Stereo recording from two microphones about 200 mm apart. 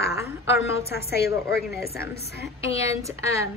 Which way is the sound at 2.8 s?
15° right (ahead or behind).